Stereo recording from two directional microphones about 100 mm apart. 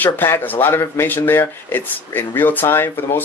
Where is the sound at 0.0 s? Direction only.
20° left (ahead or behind).